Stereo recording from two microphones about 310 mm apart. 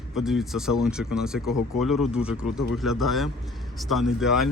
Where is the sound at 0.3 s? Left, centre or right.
Centre.